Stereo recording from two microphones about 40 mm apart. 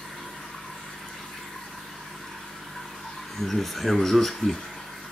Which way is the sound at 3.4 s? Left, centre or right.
Centre.